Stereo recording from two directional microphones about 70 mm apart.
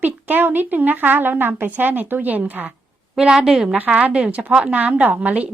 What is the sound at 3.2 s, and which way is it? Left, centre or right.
Speech, centre.